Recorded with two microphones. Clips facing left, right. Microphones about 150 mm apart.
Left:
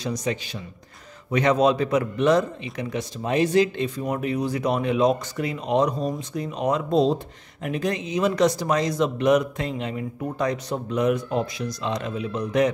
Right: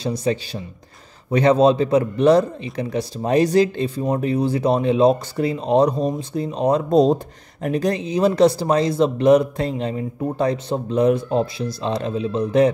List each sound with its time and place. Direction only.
0.0 s a man's voice: 30° right (ahead or behind)